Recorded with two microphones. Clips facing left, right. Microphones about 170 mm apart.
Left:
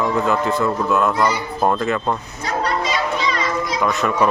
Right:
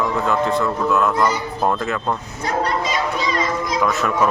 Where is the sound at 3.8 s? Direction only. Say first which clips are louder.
Left 1 dB; centre (ahead or behind).